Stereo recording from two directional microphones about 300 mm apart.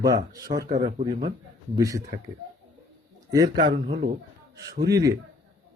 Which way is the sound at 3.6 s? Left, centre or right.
Centre.